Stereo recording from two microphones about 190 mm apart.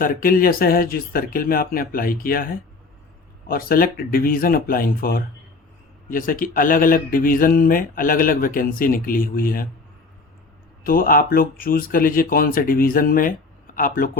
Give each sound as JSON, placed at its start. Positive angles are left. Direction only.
{"t": 0.0, "sound": "speech", "side_deg": 45}
{"t": 10.8, "sound": "speech", "side_deg": 50}